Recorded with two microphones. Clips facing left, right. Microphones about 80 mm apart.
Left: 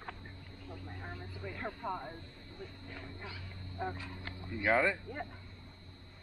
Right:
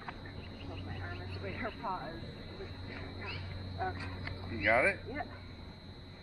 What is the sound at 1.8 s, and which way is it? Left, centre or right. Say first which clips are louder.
Speech: right 1 dB; centre.